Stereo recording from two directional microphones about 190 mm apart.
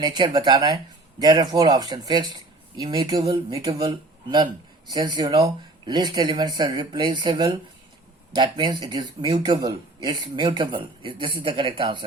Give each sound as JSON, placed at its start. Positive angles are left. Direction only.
{"t": 0.0, "sound": "speech", "side_deg": -25}